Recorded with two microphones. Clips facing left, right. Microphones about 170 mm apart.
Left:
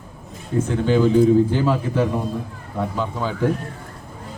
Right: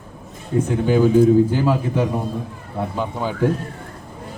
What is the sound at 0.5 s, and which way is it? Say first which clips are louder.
A man's voice: right 1 dB; 10° right (ahead or behind).